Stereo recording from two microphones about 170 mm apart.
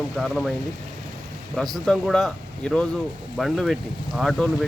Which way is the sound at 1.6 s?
Centre (ahead or behind).